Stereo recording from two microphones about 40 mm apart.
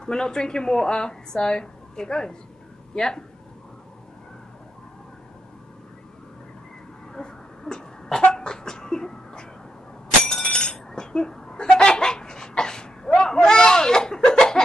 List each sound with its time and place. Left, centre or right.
0.0 s speech: centre
7.2 s throat clearing: centre
8.3 s a sound: centre